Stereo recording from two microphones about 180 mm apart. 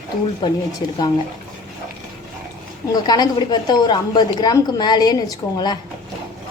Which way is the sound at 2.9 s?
20° left (ahead or behind).